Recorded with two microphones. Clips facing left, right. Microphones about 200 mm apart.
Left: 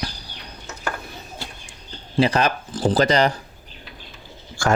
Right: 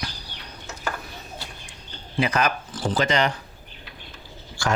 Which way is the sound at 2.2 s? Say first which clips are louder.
Left 4 dB; 30° left (ahead or behind).